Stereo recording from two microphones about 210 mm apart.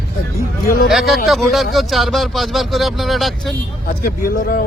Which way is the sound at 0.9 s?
Centre (ahead or behind).